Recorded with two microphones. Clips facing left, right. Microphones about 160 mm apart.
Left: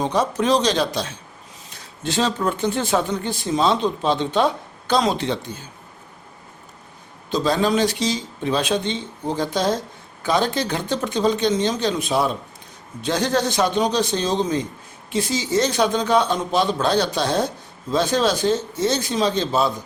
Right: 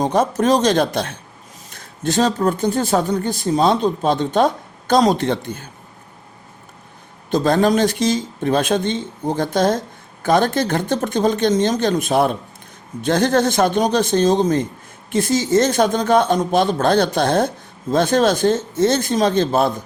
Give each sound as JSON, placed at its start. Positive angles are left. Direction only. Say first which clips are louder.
{"t": 0.0, "sound": "speech", "louder": "right 4 dB", "side_deg": -45}
{"t": 7.3, "sound": "speech", "louder": "right 4 dB", "side_deg": -55}